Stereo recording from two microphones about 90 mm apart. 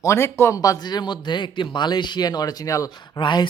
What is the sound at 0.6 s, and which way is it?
Speech, 50° left (ahead or behind).